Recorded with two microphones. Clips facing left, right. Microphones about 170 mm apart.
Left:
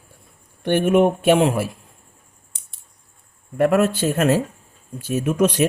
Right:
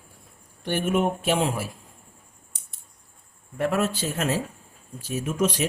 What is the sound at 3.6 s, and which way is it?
Speech, 60° left (ahead or behind).